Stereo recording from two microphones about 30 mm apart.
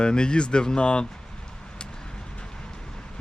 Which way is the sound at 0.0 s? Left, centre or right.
Left.